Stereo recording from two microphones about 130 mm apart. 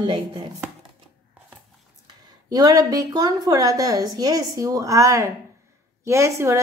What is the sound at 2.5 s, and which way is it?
A woman's voice, 30° right (ahead or behind).